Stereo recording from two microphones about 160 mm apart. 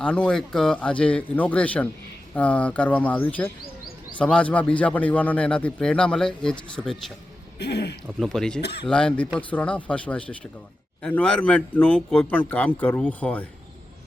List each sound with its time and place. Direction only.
0.0 s a man's voice: 5° left (ahead or behind)
7.6 s speech: 90° left
8.0 s a man's voice: 5° left (ahead or behind)